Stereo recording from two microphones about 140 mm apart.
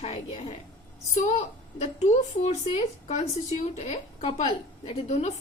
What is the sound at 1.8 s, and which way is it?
A woman's voice, 50° left (ahead or behind).